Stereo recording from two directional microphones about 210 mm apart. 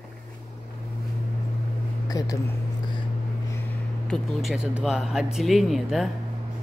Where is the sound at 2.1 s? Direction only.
15° left (ahead or behind).